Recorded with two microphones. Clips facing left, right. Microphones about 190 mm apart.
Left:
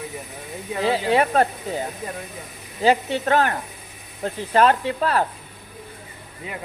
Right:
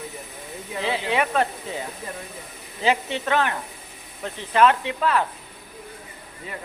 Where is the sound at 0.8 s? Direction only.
40° left (ahead or behind).